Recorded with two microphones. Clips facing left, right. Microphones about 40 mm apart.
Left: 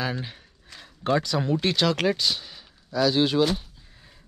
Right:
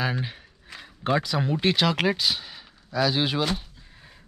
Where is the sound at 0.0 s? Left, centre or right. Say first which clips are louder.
Right 2 dB; centre.